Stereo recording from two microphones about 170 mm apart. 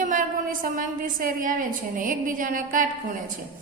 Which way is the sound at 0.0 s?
50° right (ahead or behind).